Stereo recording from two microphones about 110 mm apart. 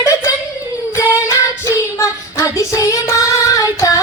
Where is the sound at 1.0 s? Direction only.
25° left (ahead or behind).